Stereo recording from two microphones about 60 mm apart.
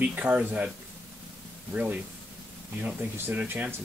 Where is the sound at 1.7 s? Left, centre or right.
Right.